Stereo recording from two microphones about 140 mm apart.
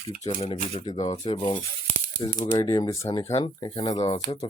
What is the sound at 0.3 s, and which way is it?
Speech, 40° left (ahead or behind).